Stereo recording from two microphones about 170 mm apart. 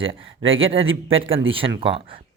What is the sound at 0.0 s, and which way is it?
Speech, 30° right (ahead or behind).